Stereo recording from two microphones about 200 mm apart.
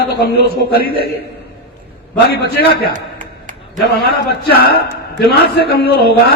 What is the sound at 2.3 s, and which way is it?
Speech, 55° left (ahead or behind).